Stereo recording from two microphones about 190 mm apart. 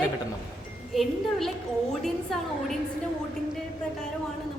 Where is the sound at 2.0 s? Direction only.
Centre (ahead or behind).